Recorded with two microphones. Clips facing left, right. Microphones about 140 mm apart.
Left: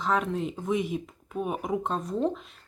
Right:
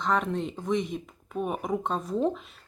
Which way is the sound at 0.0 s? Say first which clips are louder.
Even; centre (ahead or behind).